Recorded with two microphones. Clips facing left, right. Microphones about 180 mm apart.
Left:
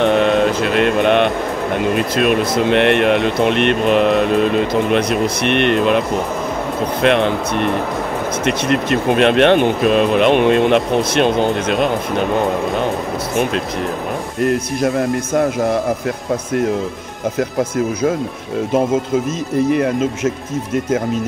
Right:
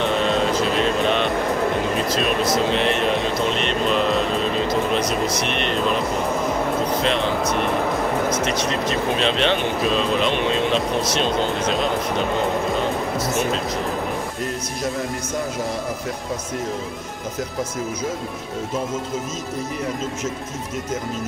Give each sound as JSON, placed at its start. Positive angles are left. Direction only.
{"t": 0.0, "sound": "music", "side_deg": 60}
{"t": 2.0, "sound": "speech", "side_deg": 60}
{"t": 8.5, "sound": "speech", "side_deg": 60}
{"t": 14.4, "sound": "speech", "side_deg": 60}
{"t": 17.4, "sound": "speech", "side_deg": 60}